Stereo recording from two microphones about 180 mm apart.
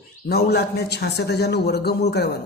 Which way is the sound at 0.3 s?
60° left (ahead or behind).